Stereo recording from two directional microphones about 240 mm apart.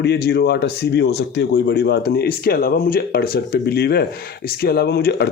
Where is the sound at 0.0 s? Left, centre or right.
Left.